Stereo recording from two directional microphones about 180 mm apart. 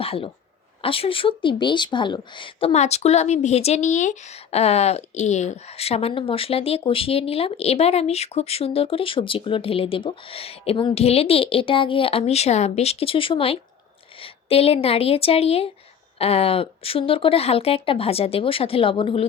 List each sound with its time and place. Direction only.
0.0 s speech: 30° left (ahead or behind)